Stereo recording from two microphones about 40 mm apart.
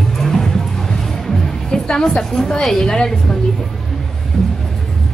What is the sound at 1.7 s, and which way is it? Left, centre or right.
A woman's voice, centre.